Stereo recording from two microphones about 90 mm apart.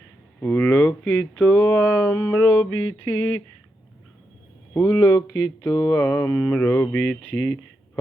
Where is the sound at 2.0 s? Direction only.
25° left (ahead or behind).